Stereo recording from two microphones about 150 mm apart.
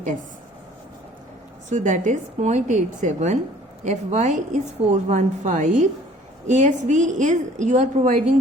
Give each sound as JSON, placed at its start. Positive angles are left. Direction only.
{"t": 1.7, "sound": "a woman's voice", "side_deg": -55}